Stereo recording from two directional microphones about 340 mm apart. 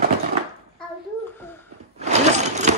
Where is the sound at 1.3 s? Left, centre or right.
Centre.